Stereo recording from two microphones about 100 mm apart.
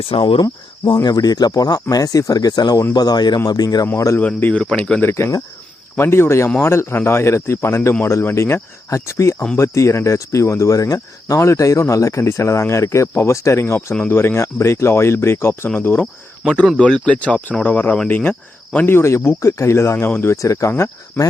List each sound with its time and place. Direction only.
0.2 s speech: 55° left (ahead or behind)
1.0 s speech: 40° left (ahead or behind)
4.2 s speech: 15° left (ahead or behind)
5.1 s speech: 25° left (ahead or behind)
13.9 s speech: 10° left (ahead or behind)
14.2 s speech: 25° left (ahead or behind)
16.6 s speech: 5° left (ahead or behind)
20.3 s speech: 30° left (ahead or behind)